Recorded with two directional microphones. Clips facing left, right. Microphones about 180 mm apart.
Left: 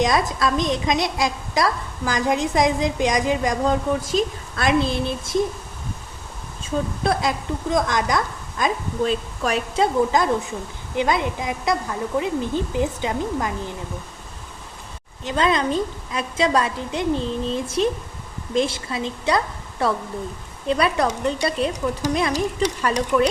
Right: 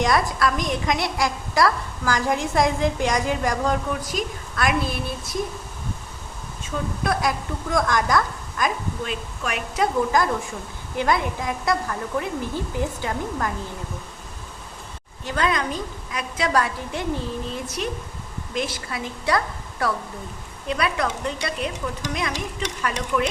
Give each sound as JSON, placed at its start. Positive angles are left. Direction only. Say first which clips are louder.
{"t": 0.0, "sound": "a woman's voice", "louder": "left 1 dB", "side_deg": 20}
{"t": 7.0, "sound": "a woman's voice", "louder": "right 1 dB", "side_deg": 25}
{"t": 15.2, "sound": "a woman's voice", "louder": "left 3 dB", "side_deg": 20}